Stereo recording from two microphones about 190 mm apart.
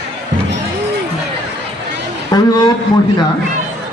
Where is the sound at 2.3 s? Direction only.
20° left (ahead or behind).